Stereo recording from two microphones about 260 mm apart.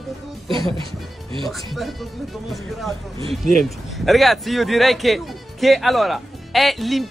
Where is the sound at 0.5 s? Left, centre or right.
Centre.